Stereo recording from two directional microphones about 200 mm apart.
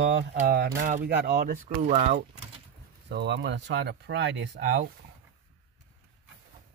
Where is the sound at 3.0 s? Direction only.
60° right (ahead or behind).